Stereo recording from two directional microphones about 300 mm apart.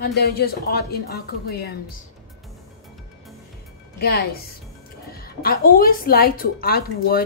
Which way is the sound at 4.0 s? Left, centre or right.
Left.